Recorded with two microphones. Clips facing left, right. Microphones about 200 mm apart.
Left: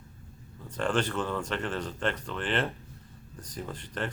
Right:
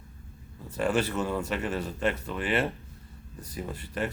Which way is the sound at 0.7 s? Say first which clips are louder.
Right 2 dB; 10° right (ahead or behind).